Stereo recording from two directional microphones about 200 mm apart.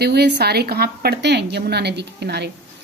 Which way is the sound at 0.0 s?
55° right (ahead or behind).